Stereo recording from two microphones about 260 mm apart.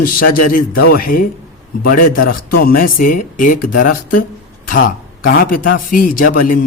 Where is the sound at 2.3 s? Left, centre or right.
Left.